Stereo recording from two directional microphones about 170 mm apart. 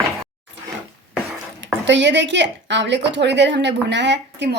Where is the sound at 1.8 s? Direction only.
90° right.